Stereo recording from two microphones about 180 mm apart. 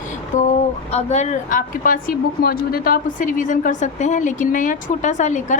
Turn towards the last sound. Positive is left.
turn(degrees=40)  # may be behind; listen again after turning